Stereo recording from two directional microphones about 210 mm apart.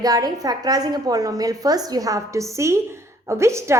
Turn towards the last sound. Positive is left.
turn(degrees=-15)  # may be behind; listen again after turning